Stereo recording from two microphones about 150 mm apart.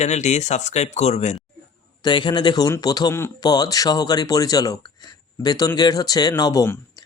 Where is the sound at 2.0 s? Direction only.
30° left (ahead or behind).